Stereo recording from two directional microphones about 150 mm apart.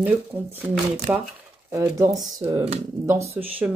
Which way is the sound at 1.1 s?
15° right (ahead or behind).